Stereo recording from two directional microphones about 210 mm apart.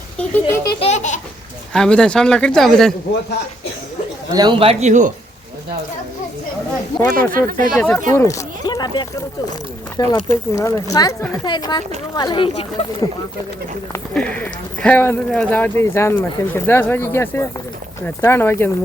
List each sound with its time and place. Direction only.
0.2 s speech: 10° left (ahead or behind)
0.8 s speech: 35° left (ahead or behind)
1.7 s speech: 5° left (ahead or behind)
4.4 s speech: 25° right (ahead or behind)
7.2 s speech: 40° right (ahead or behind)
7.8 s speech: 10° left (ahead or behind)
10.1 s speech: 15° left (ahead or behind)
13.9 s speech: 5° left (ahead or behind)